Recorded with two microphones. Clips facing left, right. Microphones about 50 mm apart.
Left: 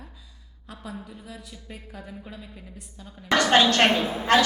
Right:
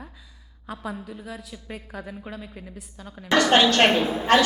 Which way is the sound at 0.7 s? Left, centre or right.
Centre.